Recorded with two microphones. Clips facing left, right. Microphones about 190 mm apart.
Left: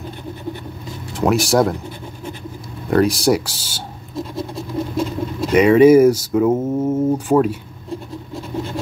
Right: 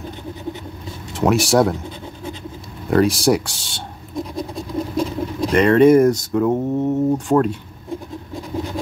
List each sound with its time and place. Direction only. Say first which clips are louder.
1.1 s speech: even; centre (ahead or behind)
2.9 s speech: even; centre (ahead or behind)
4.9 s vehicle: right 1 dB; 5° left (ahead or behind)
6.3 s speech: left 2 dB; centre (ahead or behind)
8.3 s a sound: even; 15° right (ahead or behind)